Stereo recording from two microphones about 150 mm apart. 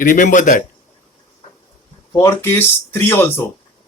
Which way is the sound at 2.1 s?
20° left (ahead or behind).